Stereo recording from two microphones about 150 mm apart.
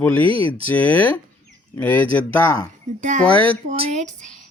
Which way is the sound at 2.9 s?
50° right (ahead or behind).